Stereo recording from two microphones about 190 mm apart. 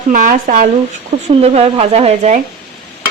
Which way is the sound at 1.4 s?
30° right (ahead or behind).